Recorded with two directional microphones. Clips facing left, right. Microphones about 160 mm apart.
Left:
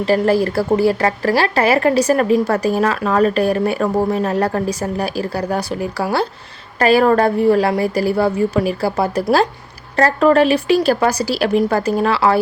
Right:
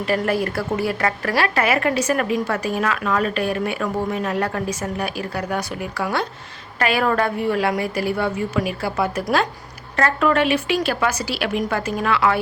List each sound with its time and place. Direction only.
0.0 s a woman's voice: 35° left (ahead or behind)